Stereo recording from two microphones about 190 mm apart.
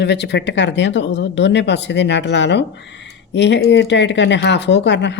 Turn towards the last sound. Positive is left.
turn(degrees=70)  # may be behind; listen again after turning